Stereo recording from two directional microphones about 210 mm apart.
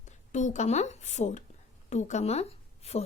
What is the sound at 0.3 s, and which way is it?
A woman's voice, 35° left (ahead or behind).